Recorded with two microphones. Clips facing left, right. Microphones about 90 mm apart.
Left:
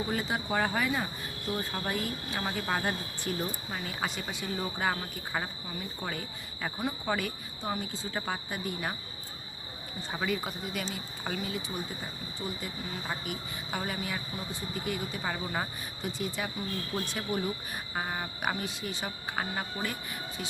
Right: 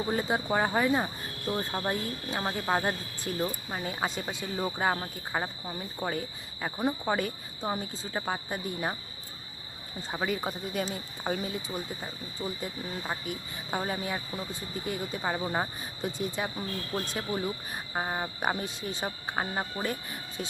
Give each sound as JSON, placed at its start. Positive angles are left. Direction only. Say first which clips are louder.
{"t": 0.1, "sound": "speech", "louder": "right 3 dB", "side_deg": -25}
{"t": 0.4, "sound": "cricket", "louder": "right 2 dB", "side_deg": -15}
{"t": 0.9, "sound": "speech", "louder": "right 4 dB", "side_deg": -30}
{"t": 3.3, "sound": "speech", "louder": "even", "side_deg": -5}
{"t": 3.7, "sound": "speech", "louder": "right 3 dB", "side_deg": -25}
{"t": 6.0, "sound": "cricket", "louder": "right 8 dB", "side_deg": -15}
{"t": 8.5, "sound": "speech", "louder": "right 2 dB", "side_deg": -20}
{"t": 10.1, "sound": "speech", "louder": "right 2 dB", "side_deg": -15}
{"t": 17.9, "sound": "cricket", "louder": "right 3 dB", "side_deg": -15}
{"t": 18.4, "sound": "speech", "louder": "right 1 dB", "side_deg": -25}